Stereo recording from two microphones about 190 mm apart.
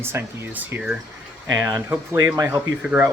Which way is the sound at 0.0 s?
10° right (ahead or behind).